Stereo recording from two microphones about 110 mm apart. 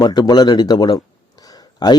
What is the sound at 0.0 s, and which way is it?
A man's voice, 40° left (ahead or behind).